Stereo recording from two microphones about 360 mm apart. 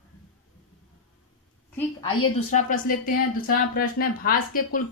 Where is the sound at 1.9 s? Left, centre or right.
Centre.